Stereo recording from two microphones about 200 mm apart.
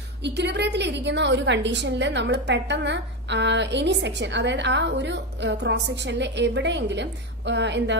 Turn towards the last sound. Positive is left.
turn(degrees=-60)  # may be behind; listen again after turning